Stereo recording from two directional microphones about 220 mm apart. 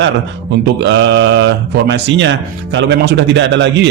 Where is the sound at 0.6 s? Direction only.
50° right (ahead or behind).